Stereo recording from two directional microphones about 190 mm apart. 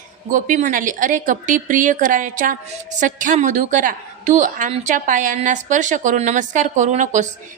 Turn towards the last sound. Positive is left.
turn(degrees=-40)  # may be behind; listen again after turning